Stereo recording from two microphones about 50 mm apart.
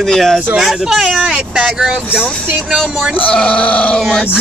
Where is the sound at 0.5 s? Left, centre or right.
Centre.